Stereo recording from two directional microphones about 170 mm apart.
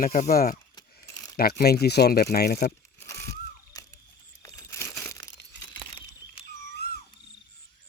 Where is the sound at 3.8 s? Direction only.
20° left (ahead or behind).